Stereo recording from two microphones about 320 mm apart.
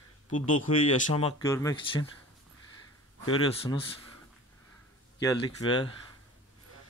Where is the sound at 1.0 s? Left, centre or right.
Centre.